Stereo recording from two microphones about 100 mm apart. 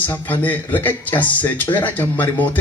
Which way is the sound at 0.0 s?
20° left (ahead or behind).